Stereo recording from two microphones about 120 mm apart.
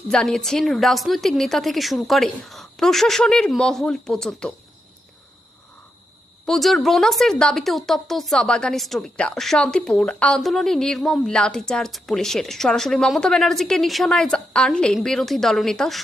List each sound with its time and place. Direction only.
0.1 s a woman's voice: 5° left (ahead or behind)
6.4 s a woman's voice: centre (ahead or behind)